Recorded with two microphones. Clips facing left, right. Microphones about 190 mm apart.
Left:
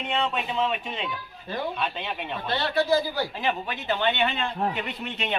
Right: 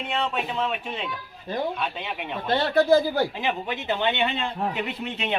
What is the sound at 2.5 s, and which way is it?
Speech, 50° right (ahead or behind).